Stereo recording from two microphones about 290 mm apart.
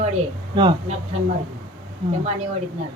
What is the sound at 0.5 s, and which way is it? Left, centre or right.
Speech, centre.